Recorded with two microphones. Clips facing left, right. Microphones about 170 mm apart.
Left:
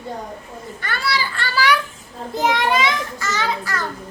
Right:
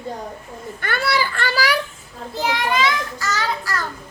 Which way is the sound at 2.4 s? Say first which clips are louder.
Left 2 dB; 25° left (ahead or behind).